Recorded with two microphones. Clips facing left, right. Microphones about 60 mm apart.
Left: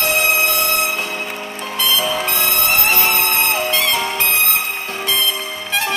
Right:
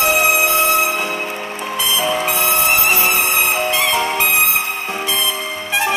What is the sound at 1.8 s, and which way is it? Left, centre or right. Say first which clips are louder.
Music: even; right.